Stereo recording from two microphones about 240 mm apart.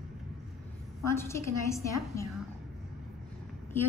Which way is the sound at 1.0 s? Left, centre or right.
Centre.